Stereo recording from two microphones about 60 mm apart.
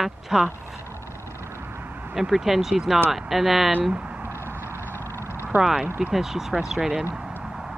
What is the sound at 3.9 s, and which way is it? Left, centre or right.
Speech, centre.